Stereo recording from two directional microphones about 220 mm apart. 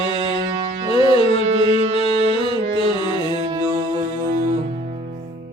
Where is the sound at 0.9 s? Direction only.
25° left (ahead or behind).